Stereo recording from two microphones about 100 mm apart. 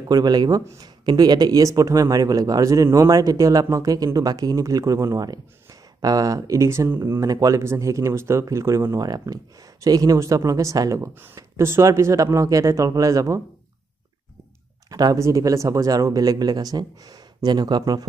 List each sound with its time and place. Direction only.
0.1 s speech: 45° right (ahead or behind)
14.9 s a sound: 40° right (ahead or behind)
15.1 s speech: 30° right (ahead or behind)